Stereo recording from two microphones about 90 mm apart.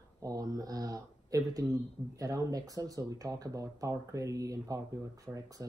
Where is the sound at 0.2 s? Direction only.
45° right (ahead or behind).